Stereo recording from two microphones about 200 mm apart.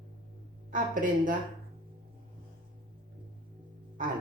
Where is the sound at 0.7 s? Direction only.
40° right (ahead or behind).